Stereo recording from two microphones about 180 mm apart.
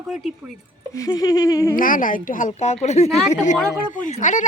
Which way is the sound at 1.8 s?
50° left (ahead or behind).